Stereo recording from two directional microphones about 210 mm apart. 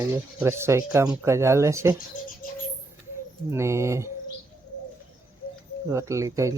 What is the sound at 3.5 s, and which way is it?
Speech, 15° right (ahead or behind).